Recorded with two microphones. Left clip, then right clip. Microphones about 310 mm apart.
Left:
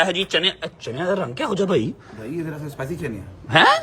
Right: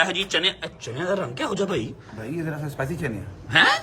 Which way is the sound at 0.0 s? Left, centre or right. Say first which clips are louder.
Left 2 dB; centre.